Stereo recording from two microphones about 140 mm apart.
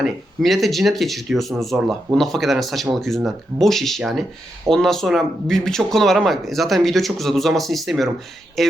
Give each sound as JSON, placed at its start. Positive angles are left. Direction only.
{"t": 0.0, "sound": "speech", "side_deg": 0}